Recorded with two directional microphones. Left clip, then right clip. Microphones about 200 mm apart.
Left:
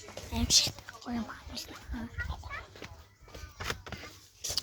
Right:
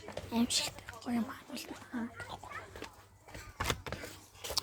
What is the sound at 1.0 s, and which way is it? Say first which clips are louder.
Speech: right 1 dB; 10° right (ahead or behind).